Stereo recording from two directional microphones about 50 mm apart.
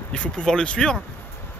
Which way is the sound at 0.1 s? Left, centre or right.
Left.